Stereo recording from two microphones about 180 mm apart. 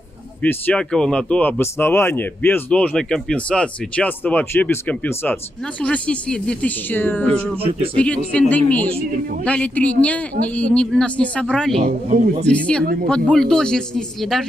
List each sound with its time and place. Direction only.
0.4 s speech: 10° left (ahead or behind)
7.6 s speech: 30° right (ahead or behind)
8.0 s speech: 5° left (ahead or behind)
11.8 s speech: 45° right (ahead or behind)
12.4 s speech: 5° left (ahead or behind)